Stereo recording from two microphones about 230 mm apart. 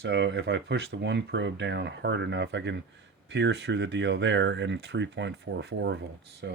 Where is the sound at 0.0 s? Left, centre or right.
Right.